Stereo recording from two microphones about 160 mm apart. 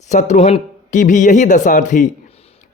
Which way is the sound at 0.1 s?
50° left (ahead or behind).